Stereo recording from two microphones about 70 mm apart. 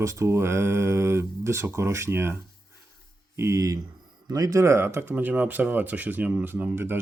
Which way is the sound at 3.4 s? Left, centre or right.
Right.